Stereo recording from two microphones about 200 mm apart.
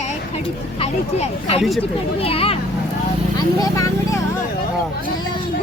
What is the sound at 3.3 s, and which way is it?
Speech, 15° left (ahead or behind).